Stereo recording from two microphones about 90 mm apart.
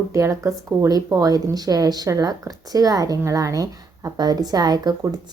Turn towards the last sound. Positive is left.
turn(degrees=-50)  # may be behind; listen again after turning